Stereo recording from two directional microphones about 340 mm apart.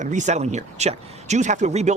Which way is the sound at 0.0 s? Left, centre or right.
Right.